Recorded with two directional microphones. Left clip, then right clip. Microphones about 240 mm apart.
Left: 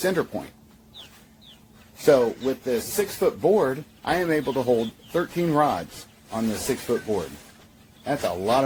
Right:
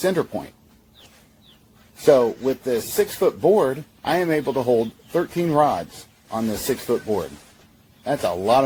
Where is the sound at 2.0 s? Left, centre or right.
Right.